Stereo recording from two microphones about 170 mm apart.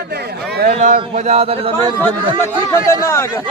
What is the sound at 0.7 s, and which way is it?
A man's voice, 50° right (ahead or behind).